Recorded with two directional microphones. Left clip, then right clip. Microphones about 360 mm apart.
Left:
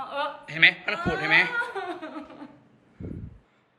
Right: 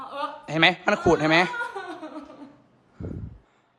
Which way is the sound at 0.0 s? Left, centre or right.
Centre.